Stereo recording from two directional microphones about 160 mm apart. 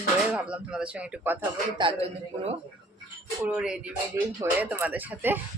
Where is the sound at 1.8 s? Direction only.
35° right (ahead or behind).